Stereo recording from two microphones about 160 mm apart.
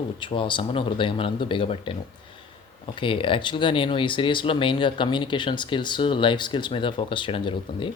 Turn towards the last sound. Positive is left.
turn(degrees=30)  # may be behind; listen again after turning